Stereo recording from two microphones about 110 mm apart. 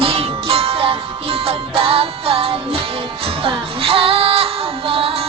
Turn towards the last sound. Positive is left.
turn(degrees=-60)  # may be behind; listen again after turning